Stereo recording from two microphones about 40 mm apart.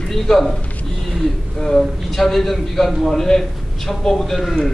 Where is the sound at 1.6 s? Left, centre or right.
Centre.